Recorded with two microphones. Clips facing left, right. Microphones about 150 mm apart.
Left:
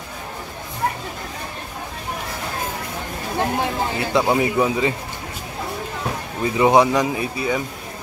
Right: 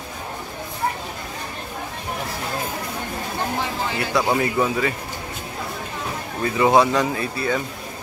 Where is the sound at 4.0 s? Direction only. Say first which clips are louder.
Left 2 dB; 20° left (ahead or behind).